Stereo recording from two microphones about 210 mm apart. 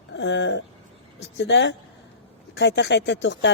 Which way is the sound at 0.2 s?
60° left (ahead or behind).